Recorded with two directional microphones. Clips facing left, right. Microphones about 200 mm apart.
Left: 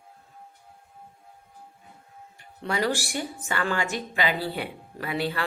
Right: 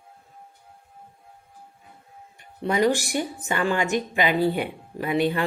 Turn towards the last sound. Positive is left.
turn(degrees=-20)  # may be behind; listen again after turning